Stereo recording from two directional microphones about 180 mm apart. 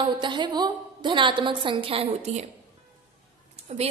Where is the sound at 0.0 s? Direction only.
25° right (ahead or behind).